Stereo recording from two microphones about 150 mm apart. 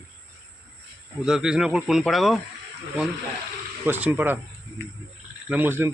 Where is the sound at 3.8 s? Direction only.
10° right (ahead or behind).